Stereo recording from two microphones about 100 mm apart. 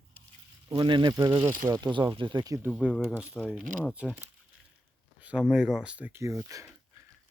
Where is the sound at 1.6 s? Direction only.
45° right (ahead or behind).